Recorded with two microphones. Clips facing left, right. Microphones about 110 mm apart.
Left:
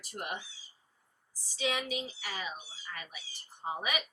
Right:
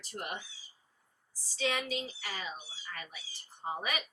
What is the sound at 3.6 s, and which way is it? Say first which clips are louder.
Speech: left 1 dB; 10° left (ahead or behind).